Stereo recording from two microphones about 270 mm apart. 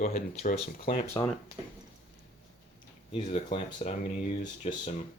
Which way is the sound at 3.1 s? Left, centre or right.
Left.